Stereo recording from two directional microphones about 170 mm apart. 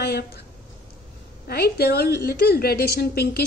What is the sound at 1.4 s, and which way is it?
A woman's voice, 65° left (ahead or behind).